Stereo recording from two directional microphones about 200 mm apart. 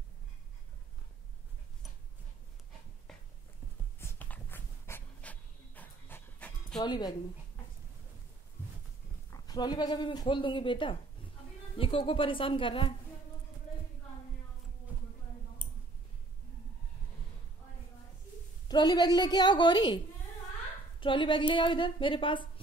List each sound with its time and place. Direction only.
3.1 s a sound: centre (ahead or behind)
4.0 s dog: 10° left (ahead or behind)
6.8 s speech: 20° left (ahead or behind)
9.3 s speech: 20° left (ahead or behind)
18.7 s speech: 20° left (ahead or behind)
21.0 s speech: 25° left (ahead or behind)